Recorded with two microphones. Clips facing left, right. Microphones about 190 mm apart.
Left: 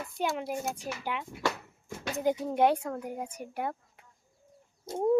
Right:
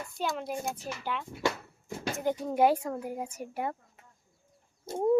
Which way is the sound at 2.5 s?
5° right (ahead or behind).